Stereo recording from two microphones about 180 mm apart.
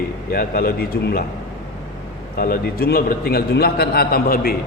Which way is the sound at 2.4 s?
55° left (ahead or behind).